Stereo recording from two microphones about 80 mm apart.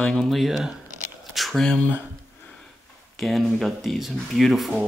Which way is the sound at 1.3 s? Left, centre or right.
Centre.